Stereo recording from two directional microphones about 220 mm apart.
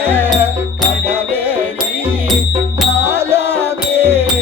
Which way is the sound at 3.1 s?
10° right (ahead or behind).